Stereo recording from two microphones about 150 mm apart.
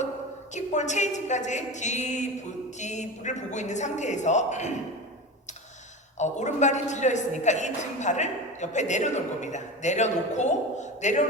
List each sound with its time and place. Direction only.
0.5 s a woman's voice: 50° left (ahead or behind)
6.1 s a woman's voice: 50° left (ahead or behind)